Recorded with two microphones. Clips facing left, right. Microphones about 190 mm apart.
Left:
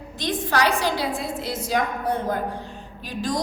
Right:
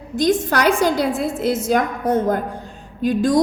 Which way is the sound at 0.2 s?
45° right (ahead or behind).